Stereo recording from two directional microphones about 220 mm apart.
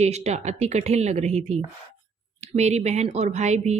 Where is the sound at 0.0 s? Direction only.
30° right (ahead or behind).